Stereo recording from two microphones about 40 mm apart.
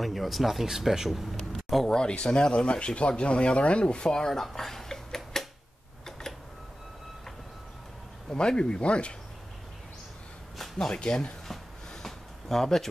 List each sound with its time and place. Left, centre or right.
0.0 s speech: centre
1.9 s speech: left
8.3 s speech: left
10.9 s speech: centre
11.9 s a sound: centre